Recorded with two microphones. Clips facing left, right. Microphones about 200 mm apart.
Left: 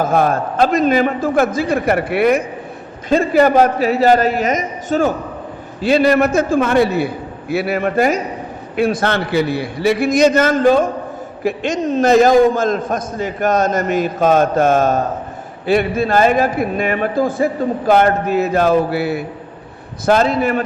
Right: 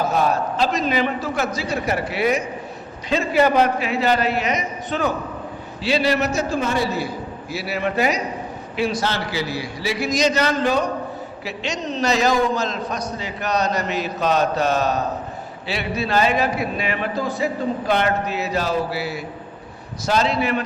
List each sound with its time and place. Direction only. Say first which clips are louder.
0.0 s a man's voice: left 5 dB; 50° left (ahead or behind)
3.1 s a man's voice: left 6 dB; 45° left (ahead or behind)